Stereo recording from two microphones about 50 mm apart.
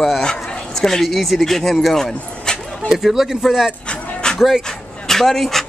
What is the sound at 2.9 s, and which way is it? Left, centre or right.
Speech, centre.